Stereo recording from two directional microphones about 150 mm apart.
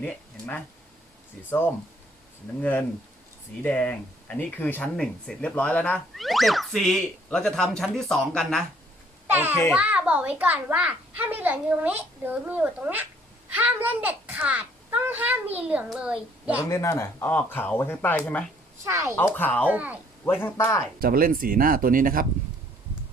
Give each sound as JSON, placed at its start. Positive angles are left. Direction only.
{"t": 0.0, "sound": "speech", "side_deg": 10}
{"t": 9.2, "sound": "a child's voice", "side_deg": -15}
{"t": 16.6, "sound": "speech", "side_deg": 20}
{"t": 18.9, "sound": "speech", "side_deg": -20}
{"t": 19.1, "sound": "speech", "side_deg": 15}
{"t": 19.6, "sound": "a child's voice", "side_deg": -10}
{"t": 20.2, "sound": "speech", "side_deg": 15}
{"t": 21.0, "sound": "speech", "side_deg": -75}